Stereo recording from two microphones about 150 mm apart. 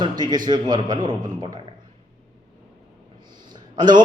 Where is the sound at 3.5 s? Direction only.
30° right (ahead or behind).